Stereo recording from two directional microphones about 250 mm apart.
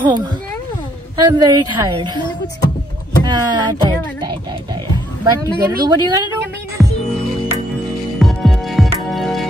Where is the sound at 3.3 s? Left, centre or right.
Centre.